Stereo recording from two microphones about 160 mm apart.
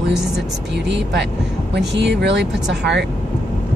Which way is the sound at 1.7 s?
90° right.